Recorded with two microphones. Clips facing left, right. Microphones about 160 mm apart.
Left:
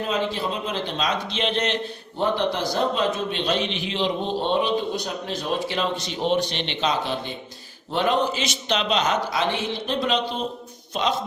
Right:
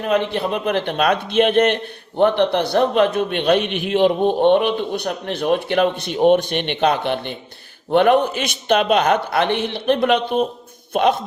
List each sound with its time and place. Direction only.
0.1 s a man's voice: 60° right (ahead or behind)